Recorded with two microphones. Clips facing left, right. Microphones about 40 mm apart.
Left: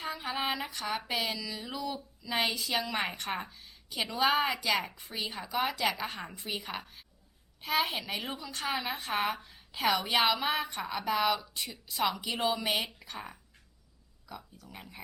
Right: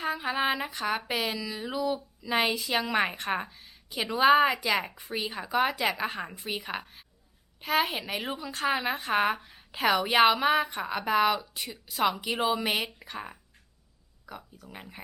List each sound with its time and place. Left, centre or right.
0.0 s a woman's voice: centre
2.9 s speech: centre
3.6 s a sound: centre
4.1 s speech: centre
5.5 s a woman's voice: right
5.9 s a woman's voice: centre
9.6 s a sound: right
9.9 s a woman's voice: centre